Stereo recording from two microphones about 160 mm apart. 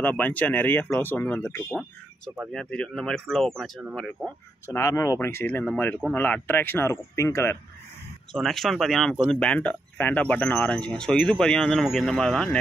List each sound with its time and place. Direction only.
0.0 s speech: 10° left (ahead or behind)
4.6 s speech: 20° left (ahead or behind)
8.3 s speech: centre (ahead or behind)